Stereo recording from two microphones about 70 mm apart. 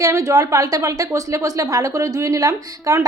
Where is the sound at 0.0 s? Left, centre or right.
Right.